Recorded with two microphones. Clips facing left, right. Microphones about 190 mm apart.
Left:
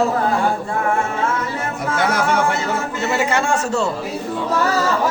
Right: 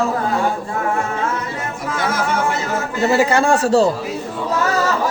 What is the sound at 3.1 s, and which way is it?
Speech, 35° right (ahead or behind).